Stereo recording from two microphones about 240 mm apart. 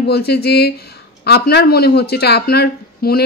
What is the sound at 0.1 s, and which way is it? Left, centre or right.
Speech, left.